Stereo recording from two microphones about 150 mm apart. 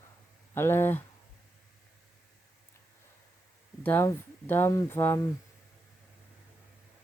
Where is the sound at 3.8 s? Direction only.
15° left (ahead or behind).